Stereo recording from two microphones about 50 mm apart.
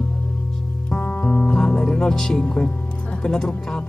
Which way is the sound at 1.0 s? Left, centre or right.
Left.